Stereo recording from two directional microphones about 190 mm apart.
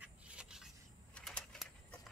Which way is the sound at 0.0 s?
5° right (ahead or behind).